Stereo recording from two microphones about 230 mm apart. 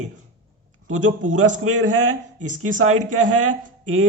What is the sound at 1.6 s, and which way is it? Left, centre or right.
Speech, right.